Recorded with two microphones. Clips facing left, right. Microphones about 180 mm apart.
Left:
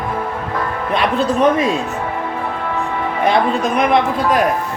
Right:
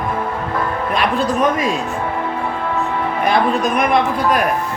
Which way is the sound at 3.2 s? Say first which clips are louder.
Left 1 dB; 25° left (ahead or behind).